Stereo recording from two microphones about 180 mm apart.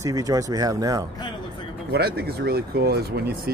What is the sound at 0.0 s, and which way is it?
Speech, 20° right (ahead or behind).